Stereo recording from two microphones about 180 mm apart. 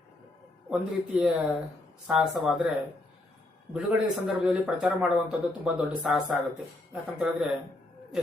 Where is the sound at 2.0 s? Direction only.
5° right (ahead or behind).